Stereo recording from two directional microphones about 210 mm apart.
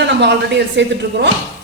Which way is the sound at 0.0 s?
55° right (ahead or behind).